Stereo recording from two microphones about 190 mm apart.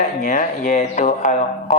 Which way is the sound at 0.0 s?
40° left (ahead or behind).